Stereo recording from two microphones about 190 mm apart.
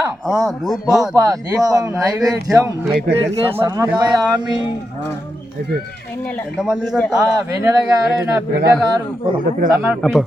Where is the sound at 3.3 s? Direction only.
30° right (ahead or behind).